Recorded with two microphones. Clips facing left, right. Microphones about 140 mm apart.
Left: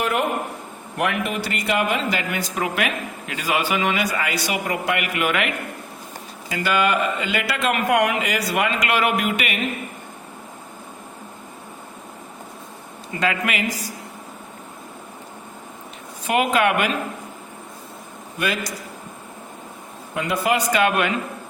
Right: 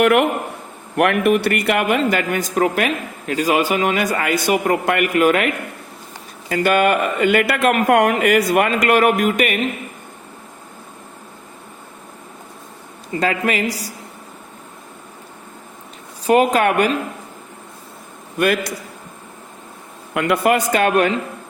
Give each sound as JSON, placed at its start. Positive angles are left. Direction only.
{"t": 0.0, "sound": "a man's voice", "side_deg": -70}
{"t": 6.5, "sound": "speech", "side_deg": -55}
{"t": 13.1, "sound": "speech", "side_deg": -35}
{"t": 16.2, "sound": "speech", "side_deg": -40}
{"t": 18.3, "sound": "a man's voice", "side_deg": -55}
{"t": 20.1, "sound": "speech", "side_deg": -60}